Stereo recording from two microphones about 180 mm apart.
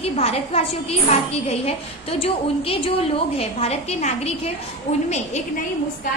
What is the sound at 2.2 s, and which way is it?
A woman's voice, 30° left (ahead or behind).